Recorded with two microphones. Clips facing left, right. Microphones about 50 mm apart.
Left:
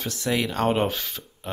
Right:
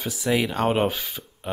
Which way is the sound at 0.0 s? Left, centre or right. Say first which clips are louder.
Right 2 dB; centre.